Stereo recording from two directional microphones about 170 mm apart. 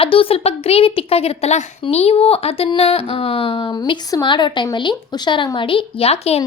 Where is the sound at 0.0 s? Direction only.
30° left (ahead or behind).